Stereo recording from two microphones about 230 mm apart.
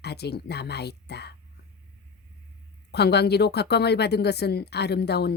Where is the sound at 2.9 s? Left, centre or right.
Left.